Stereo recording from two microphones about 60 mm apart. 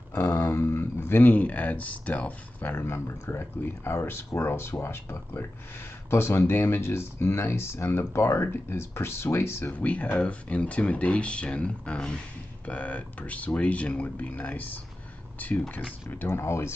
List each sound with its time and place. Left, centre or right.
0.2 s a sound: left
0.5 s speech: left
2.8 s speech: left
9.7 s speech: left